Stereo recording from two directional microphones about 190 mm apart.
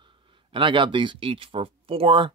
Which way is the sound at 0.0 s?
25° right (ahead or behind).